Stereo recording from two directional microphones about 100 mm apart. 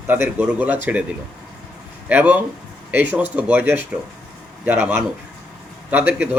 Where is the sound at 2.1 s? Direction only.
15° right (ahead or behind).